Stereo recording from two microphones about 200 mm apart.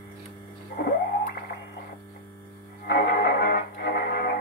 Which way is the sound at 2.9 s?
55° left (ahead or behind).